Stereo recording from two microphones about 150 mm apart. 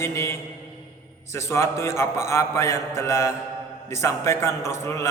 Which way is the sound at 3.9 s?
20° left (ahead or behind).